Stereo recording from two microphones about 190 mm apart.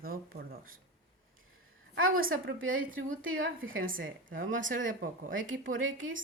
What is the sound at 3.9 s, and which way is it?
Speech, 45° right (ahead or behind).